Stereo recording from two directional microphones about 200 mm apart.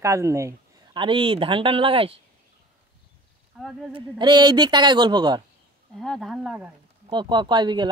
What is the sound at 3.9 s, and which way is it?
A man's voice, 20° right (ahead or behind).